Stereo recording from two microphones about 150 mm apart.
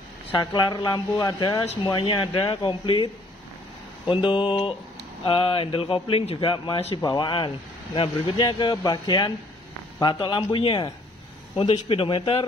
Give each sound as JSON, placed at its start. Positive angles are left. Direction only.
{"t": 0.4, "sound": "speech", "side_deg": 30}
{"t": 11.9, "sound": "speech", "side_deg": 35}